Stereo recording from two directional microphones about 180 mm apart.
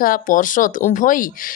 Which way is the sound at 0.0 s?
50° left (ahead or behind).